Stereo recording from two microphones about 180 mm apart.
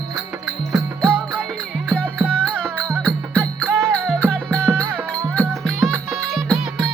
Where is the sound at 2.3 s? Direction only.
5° left (ahead or behind).